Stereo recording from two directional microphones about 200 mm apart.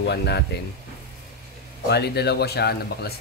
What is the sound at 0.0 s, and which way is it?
Speech, 55° left (ahead or behind).